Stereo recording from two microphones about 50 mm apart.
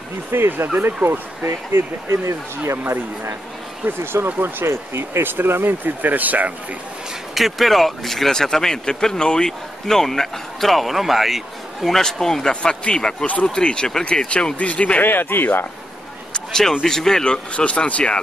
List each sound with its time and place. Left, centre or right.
0.3 s speech: right
1.4 s speech: right
4.0 s speech: right
5.2 s speech: right
7.3 s speech: centre
12.0 s speech: centre; by 15.0 s left
15.0 s speech: left
16.3 s a sound: centre
16.8 s speech: centre